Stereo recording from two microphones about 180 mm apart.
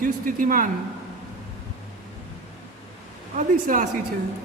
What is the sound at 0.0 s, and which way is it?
Speech, 50° right (ahead or behind).